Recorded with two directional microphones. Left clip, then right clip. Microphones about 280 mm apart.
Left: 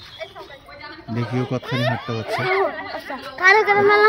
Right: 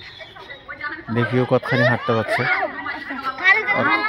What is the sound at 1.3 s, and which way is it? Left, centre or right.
Speech, centre.